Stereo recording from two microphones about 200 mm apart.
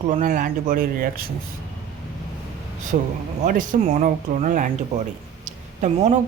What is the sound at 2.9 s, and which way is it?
Speech, 50° right (ahead or behind).